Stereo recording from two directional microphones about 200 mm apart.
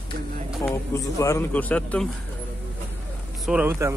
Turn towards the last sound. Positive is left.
turn(degrees=-15)  # may be behind; listen again after turning